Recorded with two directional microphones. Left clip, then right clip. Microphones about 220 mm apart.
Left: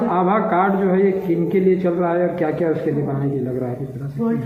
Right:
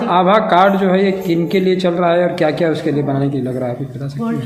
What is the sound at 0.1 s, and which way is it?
Speech, 65° right (ahead or behind).